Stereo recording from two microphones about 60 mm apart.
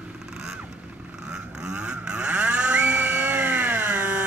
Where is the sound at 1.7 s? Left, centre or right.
Centre.